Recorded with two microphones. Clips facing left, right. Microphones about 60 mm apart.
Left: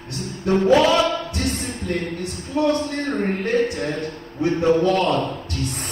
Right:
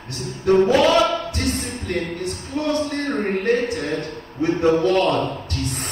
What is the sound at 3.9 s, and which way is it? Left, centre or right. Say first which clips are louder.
A man's voice: right 2 dB; right.